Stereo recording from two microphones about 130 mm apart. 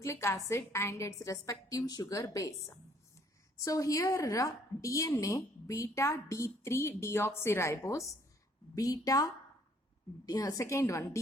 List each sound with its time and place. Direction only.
0.0 s a woman's voice: 20° left (ahead or behind)